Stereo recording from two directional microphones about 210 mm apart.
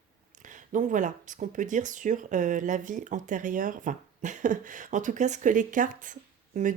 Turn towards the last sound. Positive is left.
turn(degrees=-40)  # may be behind; listen again after turning